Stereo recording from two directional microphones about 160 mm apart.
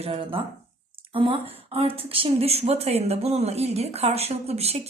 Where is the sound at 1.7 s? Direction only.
35° right (ahead or behind).